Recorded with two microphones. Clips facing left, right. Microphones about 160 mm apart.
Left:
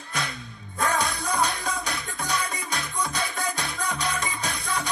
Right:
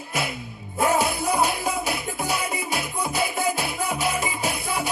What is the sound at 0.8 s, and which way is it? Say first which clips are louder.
Music: right 5 dB; 5° right (ahead or behind).